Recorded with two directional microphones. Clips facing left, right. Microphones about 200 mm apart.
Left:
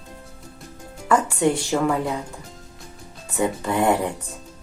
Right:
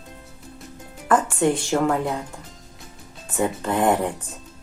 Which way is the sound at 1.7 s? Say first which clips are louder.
Right 1 dB; centre (ahead or behind).